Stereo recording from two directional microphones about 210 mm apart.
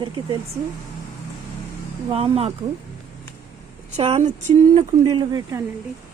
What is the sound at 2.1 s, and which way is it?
Speech, 25° right (ahead or behind).